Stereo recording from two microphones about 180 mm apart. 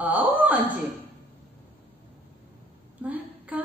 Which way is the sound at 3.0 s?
10° right (ahead or behind).